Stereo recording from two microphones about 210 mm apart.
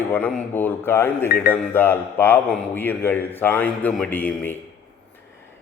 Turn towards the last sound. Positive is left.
turn(degrees=5)  # may be behind; listen again after turning